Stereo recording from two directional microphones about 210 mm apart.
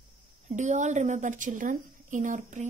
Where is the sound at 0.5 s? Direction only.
35° right (ahead or behind).